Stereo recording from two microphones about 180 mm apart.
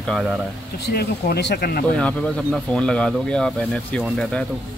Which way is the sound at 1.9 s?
5° left (ahead or behind).